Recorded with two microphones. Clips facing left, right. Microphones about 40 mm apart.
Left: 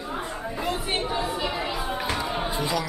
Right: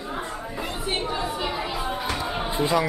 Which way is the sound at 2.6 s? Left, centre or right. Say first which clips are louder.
Right 8 dB; right.